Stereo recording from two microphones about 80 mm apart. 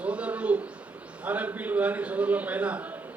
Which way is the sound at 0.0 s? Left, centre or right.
Centre.